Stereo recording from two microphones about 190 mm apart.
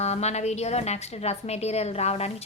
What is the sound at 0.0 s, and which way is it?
A woman's voice, 35° left (ahead or behind).